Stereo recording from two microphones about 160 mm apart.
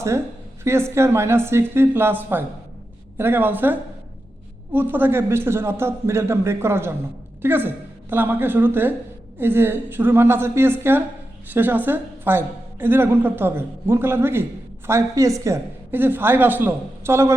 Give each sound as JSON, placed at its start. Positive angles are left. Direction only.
{"t": 0.6, "sound": "a woman's voice", "side_deg": -15}